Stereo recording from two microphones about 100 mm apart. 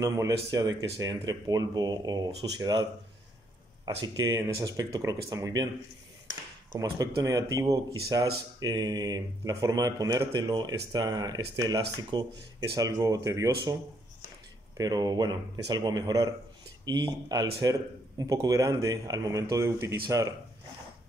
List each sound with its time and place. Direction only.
0.0 s speech: 35° right (ahead or behind)
6.7 s speech: 35° right (ahead or behind)
14.8 s speech: 40° right (ahead or behind)